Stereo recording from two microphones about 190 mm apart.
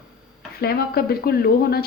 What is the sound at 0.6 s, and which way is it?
Speech, 55° left (ahead or behind).